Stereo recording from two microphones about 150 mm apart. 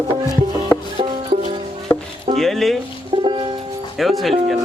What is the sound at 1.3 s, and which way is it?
Music, 45° right (ahead or behind).